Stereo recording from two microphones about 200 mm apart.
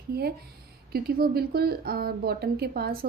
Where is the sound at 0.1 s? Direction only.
50° right (ahead or behind).